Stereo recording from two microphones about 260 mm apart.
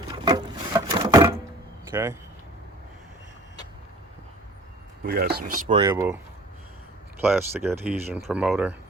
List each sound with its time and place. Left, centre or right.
0.1 s a sound: centre
1.9 s speech: centre
5.0 s speech: right
5.7 s speech: centre
7.2 s speech: centre